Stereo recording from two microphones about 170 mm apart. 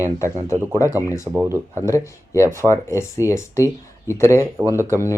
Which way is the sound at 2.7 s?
15° left (ahead or behind).